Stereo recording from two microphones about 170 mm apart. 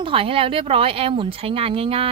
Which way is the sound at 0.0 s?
30° right (ahead or behind).